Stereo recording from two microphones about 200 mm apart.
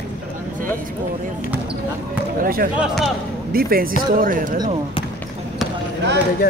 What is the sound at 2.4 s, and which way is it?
Speech, 45° right (ahead or behind).